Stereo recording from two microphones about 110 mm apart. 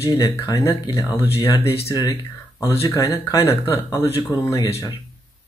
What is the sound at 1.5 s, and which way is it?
Speech, 60° left (ahead or behind).